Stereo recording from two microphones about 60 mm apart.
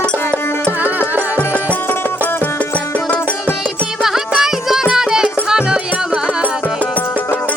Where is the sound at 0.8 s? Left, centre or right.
Right.